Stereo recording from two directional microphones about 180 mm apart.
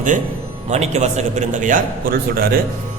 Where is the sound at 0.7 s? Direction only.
40° right (ahead or behind); by 2.6 s 55° right (ahead or behind).